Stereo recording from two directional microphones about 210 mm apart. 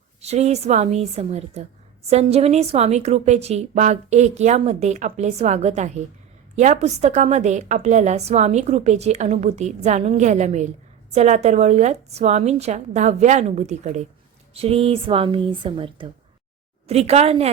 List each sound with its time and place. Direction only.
0.2 s a woman's voice: 30° right (ahead or behind)